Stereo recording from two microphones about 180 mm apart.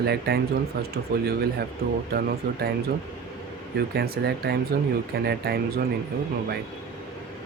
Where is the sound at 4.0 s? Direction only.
60° right (ahead or behind).